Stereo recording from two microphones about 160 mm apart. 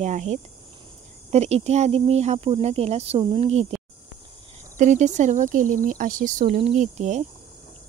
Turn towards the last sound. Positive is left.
turn(degrees=-50)  # may be behind; listen again after turning